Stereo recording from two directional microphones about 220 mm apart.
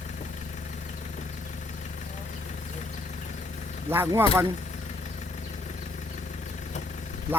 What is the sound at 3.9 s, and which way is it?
Speech, 10° right (ahead or behind).